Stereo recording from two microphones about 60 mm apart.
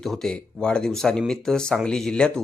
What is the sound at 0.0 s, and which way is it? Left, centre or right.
Speech, centre.